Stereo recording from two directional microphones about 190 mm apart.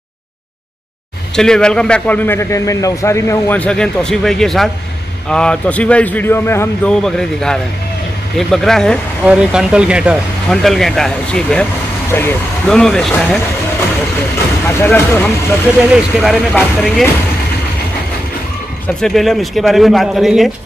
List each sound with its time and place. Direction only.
1.3 s a man's voice: 5° left (ahead or behind)
14.7 s a man's voice: 10° left (ahead or behind)
15.9 s a man's voice: centre (ahead or behind)
18.9 s a man's voice: centre (ahead or behind)